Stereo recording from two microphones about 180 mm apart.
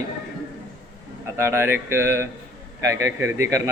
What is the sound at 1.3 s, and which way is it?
Speech, 15° right (ahead or behind).